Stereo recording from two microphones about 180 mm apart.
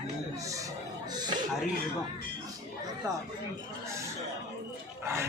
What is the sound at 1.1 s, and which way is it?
Chuckle, 25° right (ahead or behind).